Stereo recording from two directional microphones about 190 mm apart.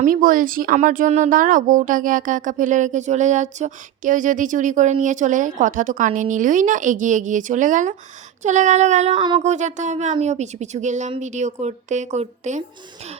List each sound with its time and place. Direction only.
0.0 s speech: 45° right (ahead or behind); by 9.4 s 25° right (ahead or behind)
9.4 s speech: 40° right (ahead or behind)